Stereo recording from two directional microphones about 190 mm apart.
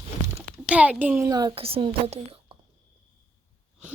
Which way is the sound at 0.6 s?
5° right (ahead or behind).